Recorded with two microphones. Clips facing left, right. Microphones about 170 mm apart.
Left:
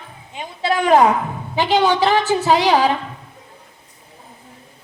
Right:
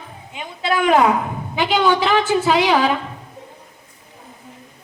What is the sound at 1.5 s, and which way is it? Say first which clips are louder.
A woman's voice: left 1 dB; 40° left (ahead or behind).